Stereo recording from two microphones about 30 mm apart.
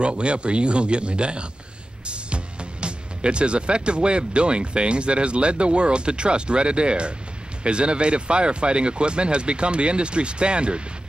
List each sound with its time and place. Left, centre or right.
0.0 s speech: right